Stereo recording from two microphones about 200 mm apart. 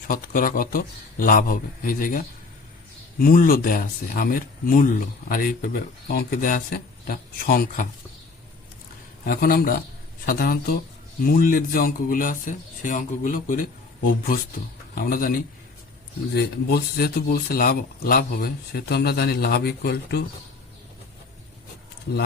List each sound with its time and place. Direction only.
0.1 s speech: 45° left (ahead or behind)
9.2 s speech: 45° left (ahead or behind)